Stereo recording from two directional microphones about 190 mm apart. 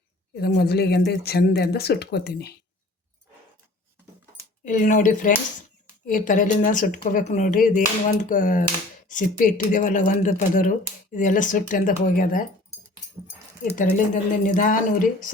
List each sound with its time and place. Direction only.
0.3 s speech: 55° left (ahead or behind)
4.6 s speech: 45° left (ahead or behind)
14.1 s speech: 45° left (ahead or behind)